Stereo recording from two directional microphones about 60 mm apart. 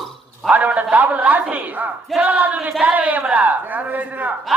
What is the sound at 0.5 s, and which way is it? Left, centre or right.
Speech, right.